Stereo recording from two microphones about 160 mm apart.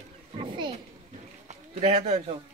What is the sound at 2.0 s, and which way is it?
Speech, 40° right (ahead or behind).